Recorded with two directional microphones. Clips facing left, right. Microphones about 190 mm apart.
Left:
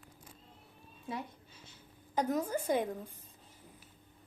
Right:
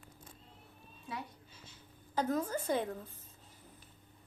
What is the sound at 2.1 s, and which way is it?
A woman's voice, 15° left (ahead or behind).